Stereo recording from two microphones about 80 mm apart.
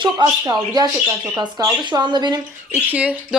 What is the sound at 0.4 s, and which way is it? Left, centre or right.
Speech, right.